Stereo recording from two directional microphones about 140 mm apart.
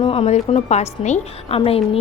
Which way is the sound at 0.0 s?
40° left (ahead or behind).